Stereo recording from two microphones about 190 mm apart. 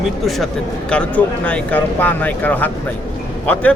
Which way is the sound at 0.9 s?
5° left (ahead or behind).